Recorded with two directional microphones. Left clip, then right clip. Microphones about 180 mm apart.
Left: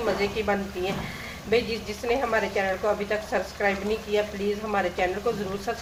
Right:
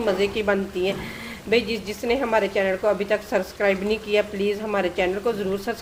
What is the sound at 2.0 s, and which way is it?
A woman's voice, 60° right (ahead or behind).